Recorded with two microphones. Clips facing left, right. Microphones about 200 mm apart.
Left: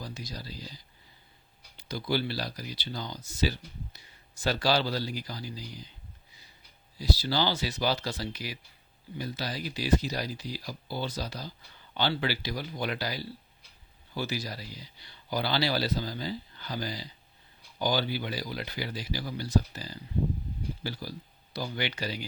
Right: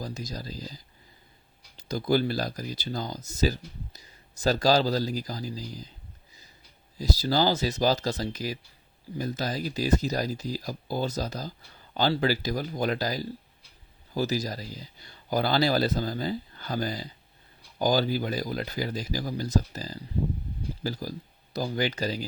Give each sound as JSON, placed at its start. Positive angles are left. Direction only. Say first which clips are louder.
{"t": 0.0, "sound": "speech", "louder": "right 5 dB", "side_deg": -45}
{"t": 7.0, "sound": "speech", "louder": "right 4 dB", "side_deg": -45}